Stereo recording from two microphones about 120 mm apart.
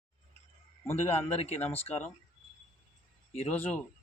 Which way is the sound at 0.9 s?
60° left (ahead or behind).